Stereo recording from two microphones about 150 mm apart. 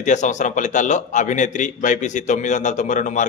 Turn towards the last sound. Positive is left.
turn(degrees=55)  # may be behind; listen again after turning